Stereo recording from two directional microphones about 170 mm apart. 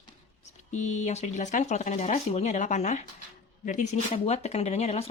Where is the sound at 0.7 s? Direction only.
45° left (ahead or behind).